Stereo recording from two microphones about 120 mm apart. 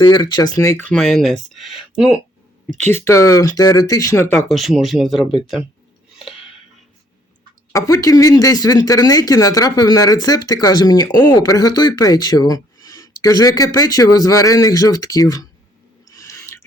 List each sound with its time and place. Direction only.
0.0 s speech: 35° left (ahead or behind)
0.9 s speech: 5° left (ahead or behind)
2.8 s speech: 20° left (ahead or behind)
4.4 s speech: centre (ahead or behind)
7.7 s speech: 25° left (ahead or behind)
16.0 s a sound: 30° left (ahead or behind)